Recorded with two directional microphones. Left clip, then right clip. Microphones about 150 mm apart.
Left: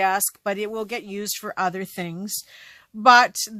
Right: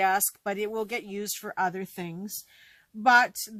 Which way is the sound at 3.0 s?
30° left (ahead or behind).